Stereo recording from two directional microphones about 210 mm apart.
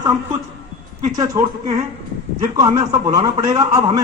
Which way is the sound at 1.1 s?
20° right (ahead or behind).